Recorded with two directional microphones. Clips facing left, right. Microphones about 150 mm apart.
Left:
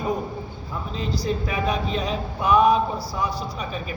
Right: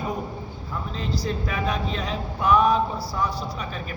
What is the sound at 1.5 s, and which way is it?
A man's voice, 15° left (ahead or behind).